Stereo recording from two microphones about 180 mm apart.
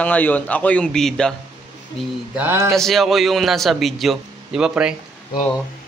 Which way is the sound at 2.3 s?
15° right (ahead or behind).